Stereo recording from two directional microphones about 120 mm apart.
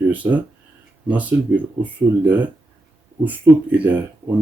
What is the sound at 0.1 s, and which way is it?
Speech, 15° right (ahead or behind).